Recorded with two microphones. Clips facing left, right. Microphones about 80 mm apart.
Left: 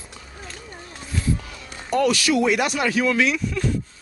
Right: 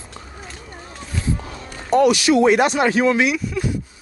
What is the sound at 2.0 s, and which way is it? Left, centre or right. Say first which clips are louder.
Speech: right 5 dB; centre.